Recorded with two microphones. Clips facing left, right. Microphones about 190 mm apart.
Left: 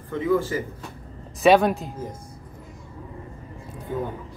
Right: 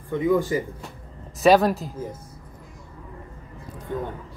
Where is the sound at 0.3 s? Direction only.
15° right (ahead or behind).